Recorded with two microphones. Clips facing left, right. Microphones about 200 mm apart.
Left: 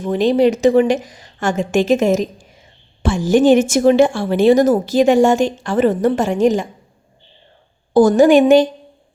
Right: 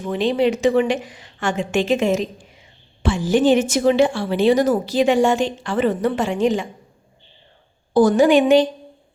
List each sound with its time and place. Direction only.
0.0 s a woman's voice: 40° left (ahead or behind)
7.9 s a woman's voice: 45° left (ahead or behind)